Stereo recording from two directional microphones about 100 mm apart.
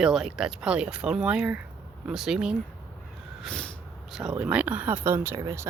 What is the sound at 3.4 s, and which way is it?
Snort, 5° left (ahead or behind).